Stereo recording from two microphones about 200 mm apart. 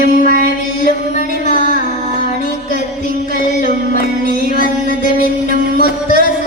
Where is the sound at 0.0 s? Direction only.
45° left (ahead or behind).